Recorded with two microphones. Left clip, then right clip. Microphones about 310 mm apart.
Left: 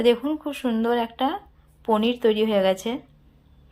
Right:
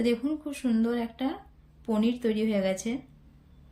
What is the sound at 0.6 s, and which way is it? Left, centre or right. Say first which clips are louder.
Speech: left 3 dB; left.